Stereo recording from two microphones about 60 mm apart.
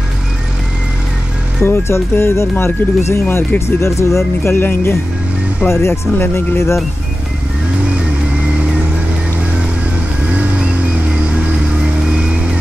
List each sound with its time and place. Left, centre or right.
1.6 s speech: left
4.5 s speech: left
7.9 s vehicle: right
10.2 s music: right
12.0 s vehicle: centre